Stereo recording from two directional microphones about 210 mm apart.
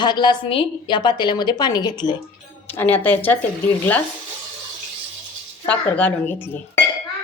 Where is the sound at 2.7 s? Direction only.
10° left (ahead or behind).